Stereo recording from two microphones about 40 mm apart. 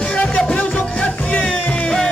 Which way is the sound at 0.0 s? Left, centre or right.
Left.